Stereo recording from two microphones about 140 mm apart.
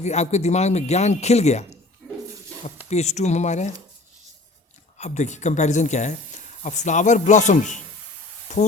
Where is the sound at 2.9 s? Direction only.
50° left (ahead or behind).